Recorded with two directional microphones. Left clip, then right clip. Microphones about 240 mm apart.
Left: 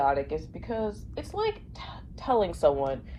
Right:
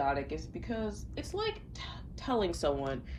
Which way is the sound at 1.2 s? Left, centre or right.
Left.